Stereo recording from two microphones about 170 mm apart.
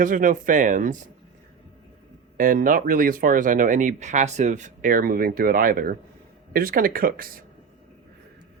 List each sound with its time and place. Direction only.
0.0 s speech: 50° right (ahead or behind)
2.4 s speech: 55° right (ahead or behind)